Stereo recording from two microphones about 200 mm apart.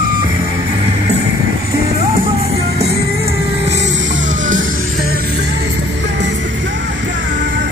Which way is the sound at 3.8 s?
35° right (ahead or behind).